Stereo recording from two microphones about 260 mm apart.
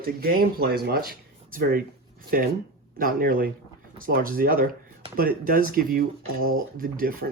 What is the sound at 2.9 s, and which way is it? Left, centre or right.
Speech, right.